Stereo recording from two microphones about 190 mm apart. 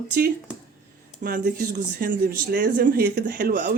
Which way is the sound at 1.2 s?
45° right (ahead or behind).